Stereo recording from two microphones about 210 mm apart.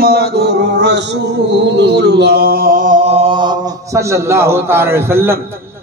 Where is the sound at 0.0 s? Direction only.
50° right (ahead or behind).